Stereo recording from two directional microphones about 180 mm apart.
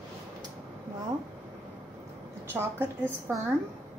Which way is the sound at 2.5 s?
15° right (ahead or behind).